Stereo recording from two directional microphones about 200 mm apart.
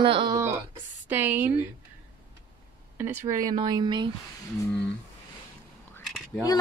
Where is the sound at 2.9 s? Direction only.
10° right (ahead or behind).